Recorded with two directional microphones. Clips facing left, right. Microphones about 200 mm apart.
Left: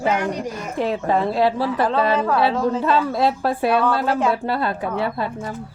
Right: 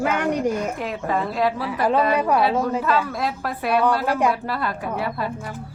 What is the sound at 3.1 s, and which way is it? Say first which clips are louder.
Speech: left 6 dB; 30° left (ahead or behind).